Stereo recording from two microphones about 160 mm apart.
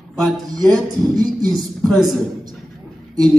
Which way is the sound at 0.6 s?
25° right (ahead or behind).